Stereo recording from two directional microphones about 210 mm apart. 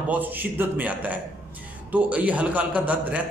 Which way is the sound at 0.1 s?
10° right (ahead or behind).